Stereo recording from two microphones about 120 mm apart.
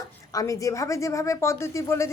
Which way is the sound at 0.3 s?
25° left (ahead or behind).